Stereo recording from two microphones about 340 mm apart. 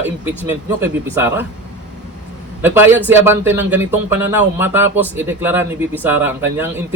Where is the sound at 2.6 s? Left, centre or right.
Centre.